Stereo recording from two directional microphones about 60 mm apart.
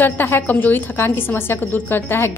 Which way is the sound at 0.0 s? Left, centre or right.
Left.